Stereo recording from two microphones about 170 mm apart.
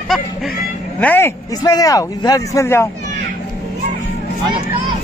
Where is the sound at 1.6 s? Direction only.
20° left (ahead or behind).